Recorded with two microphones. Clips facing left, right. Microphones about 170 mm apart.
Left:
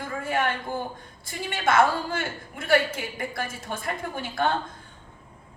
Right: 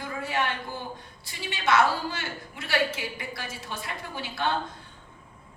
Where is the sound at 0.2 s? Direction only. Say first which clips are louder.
Left 3 dB; 50° left (ahead or behind).